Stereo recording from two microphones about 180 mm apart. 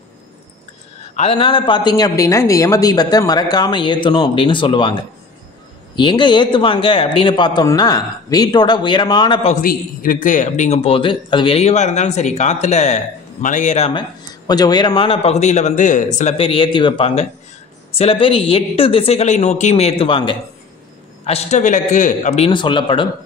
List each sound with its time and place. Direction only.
1.1 s speech: 35° left (ahead or behind)
5.9 s speech: 25° left (ahead or behind)
9.5 s a man's voice: 50° left (ahead or behind); by 14.0 s 35° left (ahead or behind)
14.5 s a man's voice: 20° left (ahead or behind)